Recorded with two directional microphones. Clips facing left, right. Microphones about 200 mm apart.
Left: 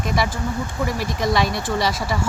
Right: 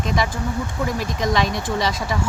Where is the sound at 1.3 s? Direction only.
10° left (ahead or behind).